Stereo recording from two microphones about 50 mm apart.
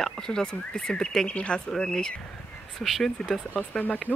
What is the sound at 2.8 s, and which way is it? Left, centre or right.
Speech, centre.